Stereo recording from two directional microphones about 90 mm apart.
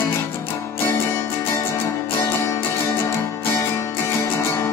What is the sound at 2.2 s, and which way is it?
Music, 25° left (ahead or behind).